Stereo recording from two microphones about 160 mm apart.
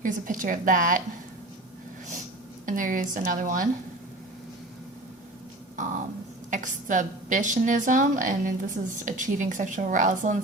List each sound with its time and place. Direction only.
0.0 s a woman's voice: 55° right (ahead or behind)
2.6 s a woman's voice: 55° right (ahead or behind)
5.7 s a sound: 50° right (ahead or behind)
6.5 s a woman's voice: 50° right (ahead or behind)